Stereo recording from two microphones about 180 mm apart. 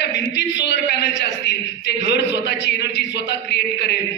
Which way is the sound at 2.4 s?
70° left (ahead or behind).